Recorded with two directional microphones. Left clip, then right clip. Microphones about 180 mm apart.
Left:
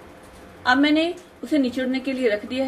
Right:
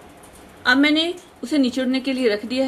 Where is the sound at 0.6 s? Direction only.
45° right (ahead or behind).